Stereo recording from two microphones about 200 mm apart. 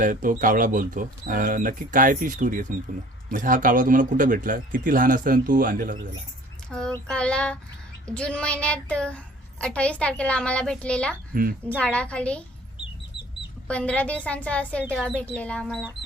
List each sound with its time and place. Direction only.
0.0 s speech: 40° right (ahead or behind)
6.7 s a woman's voice: 5° left (ahead or behind)
13.7 s speech: 5° left (ahead or behind)